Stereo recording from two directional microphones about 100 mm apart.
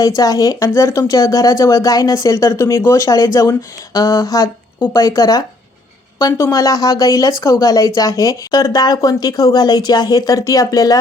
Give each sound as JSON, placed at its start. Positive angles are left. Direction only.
{"t": 0.2, "sound": "speech", "side_deg": 35}